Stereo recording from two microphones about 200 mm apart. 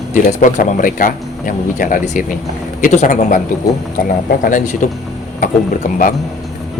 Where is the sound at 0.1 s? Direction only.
40° left (ahead or behind).